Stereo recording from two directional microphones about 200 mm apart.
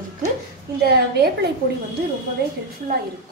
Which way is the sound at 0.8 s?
55° right (ahead or behind).